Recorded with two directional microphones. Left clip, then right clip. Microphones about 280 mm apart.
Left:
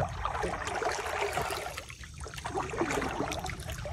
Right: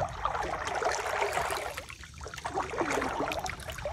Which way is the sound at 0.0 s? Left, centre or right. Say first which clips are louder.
Right 1 dB; right.